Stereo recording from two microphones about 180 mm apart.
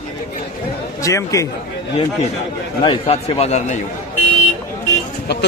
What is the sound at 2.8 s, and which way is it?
Speech, 30° left (ahead or behind).